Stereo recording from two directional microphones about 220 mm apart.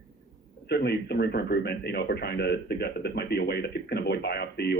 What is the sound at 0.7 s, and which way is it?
A man's voice, 45° left (ahead or behind).